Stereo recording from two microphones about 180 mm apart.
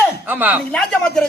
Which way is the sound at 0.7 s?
5° left (ahead or behind).